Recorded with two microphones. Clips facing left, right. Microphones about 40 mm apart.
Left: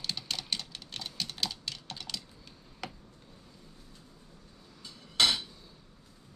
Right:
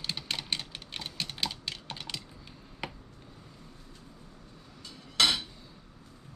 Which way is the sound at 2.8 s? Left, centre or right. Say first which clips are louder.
Right 3 dB; centre.